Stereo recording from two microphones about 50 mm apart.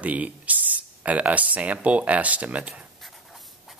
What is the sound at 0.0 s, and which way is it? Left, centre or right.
Speech, right.